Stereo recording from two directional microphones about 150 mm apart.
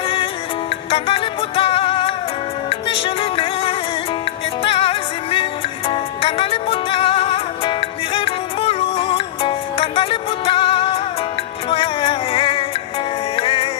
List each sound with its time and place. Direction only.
0.8 s music: 35° left (ahead or behind)
4.7 s music: 40° left (ahead or behind)